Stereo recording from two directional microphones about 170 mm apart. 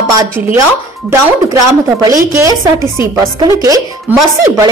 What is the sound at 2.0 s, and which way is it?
A woman's voice, 20° right (ahead or behind).